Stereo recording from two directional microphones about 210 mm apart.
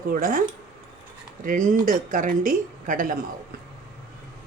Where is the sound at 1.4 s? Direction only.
40° right (ahead or behind).